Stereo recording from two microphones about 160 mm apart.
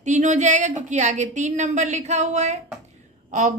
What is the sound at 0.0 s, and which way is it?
A woman's voice, 45° right (ahead or behind).